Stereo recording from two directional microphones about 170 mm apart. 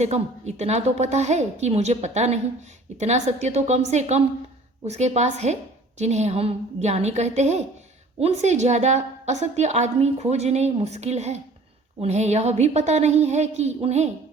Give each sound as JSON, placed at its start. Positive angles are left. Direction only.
{"t": 0.0, "sound": "a woman's voice", "side_deg": -40}